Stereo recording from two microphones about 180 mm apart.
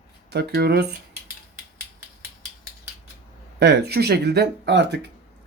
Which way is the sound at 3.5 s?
65° right (ahead or behind).